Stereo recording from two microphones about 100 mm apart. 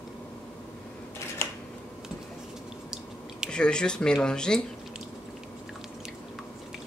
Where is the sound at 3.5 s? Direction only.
10° left (ahead or behind).